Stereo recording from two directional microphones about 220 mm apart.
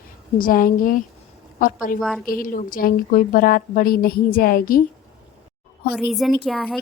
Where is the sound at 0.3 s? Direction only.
40° left (ahead or behind).